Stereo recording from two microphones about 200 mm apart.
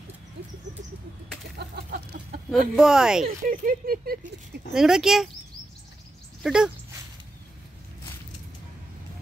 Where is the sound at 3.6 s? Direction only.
45° right (ahead or behind).